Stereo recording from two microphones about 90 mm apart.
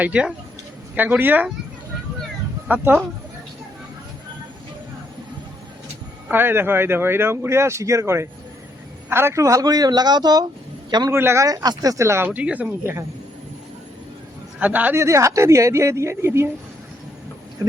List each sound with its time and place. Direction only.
0.0 s speech: 15° right (ahead or behind)
2.6 s speech: 20° right (ahead or behind)
6.3 s a man's voice: 25° right (ahead or behind); by 10.4 s 50° right (ahead or behind)
11.1 s speech: 30° right (ahead or behind)
11.4 s speech: 45° right (ahead or behind); by 12.6 s 15° right (ahead or behind)
12.8 s speech: 30° right (ahead or behind)
14.6 s speech: 20° right (ahead or behind)
15.0 s speech: 35° right (ahead or behind)